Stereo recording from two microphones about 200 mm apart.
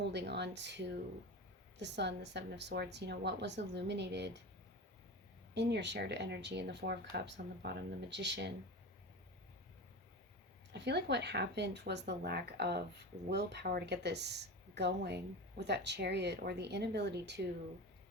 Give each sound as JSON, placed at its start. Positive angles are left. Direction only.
{"t": 0.1, "sound": "speech", "side_deg": -60}
{"t": 5.5, "sound": "speech", "side_deg": -60}
{"t": 10.7, "sound": "speech", "side_deg": -55}